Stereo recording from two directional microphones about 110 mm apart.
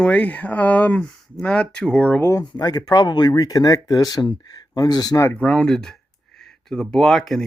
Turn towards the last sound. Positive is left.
turn(degrees=5)  # may be behind; listen again after turning